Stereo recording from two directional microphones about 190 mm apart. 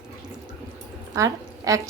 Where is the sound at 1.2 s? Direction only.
15° right (ahead or behind).